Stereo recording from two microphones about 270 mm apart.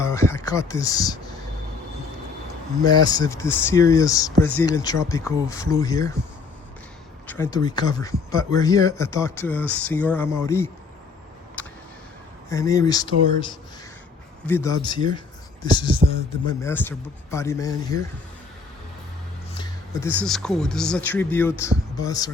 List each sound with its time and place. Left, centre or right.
0.0 s speech: centre
2.8 s speech: centre
7.3 s speech: centre
11.6 s a sound: centre
12.5 s speech: centre
14.4 s speech: centre
16.0 s speech: right
16.5 s speech: centre
19.5 s speech: centre